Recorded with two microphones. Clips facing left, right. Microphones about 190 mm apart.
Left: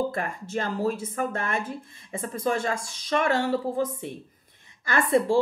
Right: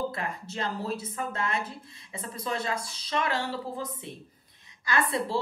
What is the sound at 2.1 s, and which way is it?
Speech, 50° left (ahead or behind).